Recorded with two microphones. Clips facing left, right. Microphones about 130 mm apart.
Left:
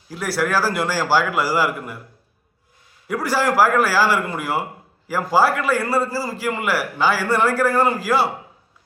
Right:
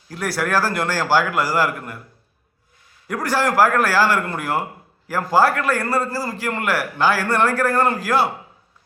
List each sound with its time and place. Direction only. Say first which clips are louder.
0.1 s a man's voice: even; 5° left (ahead or behind)
3.1 s a man's voice: even; 5° left (ahead or behind)